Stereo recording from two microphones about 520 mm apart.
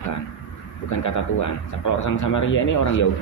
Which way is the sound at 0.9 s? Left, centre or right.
Left.